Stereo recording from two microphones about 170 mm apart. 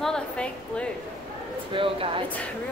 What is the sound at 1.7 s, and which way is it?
Speech, 30° right (ahead or behind).